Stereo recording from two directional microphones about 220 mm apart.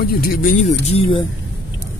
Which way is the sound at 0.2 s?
40° left (ahead or behind).